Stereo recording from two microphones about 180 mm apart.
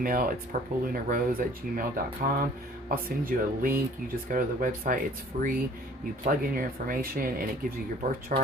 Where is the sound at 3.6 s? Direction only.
55° right (ahead or behind).